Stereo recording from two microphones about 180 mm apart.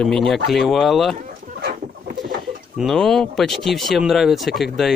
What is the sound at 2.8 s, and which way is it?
Speech, centre (ahead or behind).